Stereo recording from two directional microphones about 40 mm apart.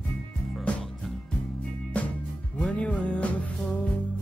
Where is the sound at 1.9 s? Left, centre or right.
Left.